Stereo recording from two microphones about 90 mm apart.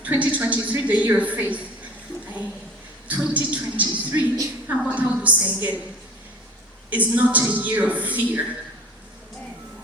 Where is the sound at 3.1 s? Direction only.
15° right (ahead or behind).